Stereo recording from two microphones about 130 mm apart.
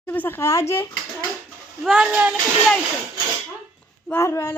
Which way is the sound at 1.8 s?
5° right (ahead or behind).